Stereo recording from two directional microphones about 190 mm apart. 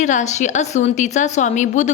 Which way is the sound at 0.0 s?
40° left (ahead or behind).